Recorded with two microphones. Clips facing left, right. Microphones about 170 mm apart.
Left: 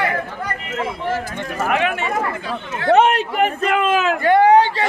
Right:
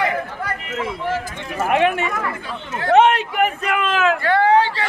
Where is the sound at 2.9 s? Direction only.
40° left (ahead or behind); by 4.8 s 15° left (ahead or behind).